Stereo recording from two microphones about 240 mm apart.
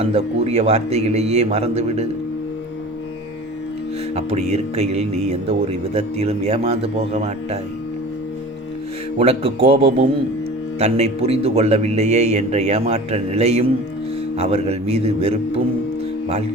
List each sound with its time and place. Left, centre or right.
0.0 s speech: right
4.1 s speech: right
9.1 s speech: right